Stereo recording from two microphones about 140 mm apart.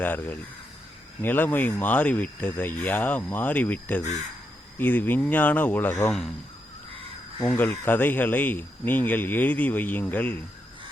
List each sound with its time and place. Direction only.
0.0 s speech: 15° left (ahead or behind)
7.4 s speech: 15° left (ahead or behind)